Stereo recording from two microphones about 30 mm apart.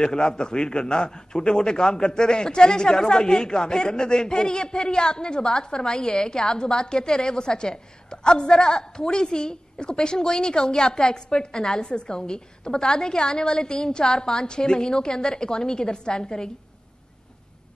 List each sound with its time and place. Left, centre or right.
0.0 s a man's voice: left